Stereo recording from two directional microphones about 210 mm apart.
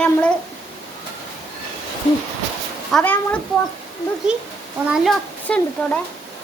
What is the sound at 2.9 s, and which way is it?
Child singing, 10° left (ahead or behind).